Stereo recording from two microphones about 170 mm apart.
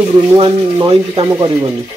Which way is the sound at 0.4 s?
25° right (ahead or behind).